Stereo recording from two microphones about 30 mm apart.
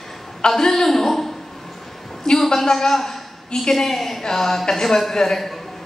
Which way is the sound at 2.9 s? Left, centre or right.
Centre.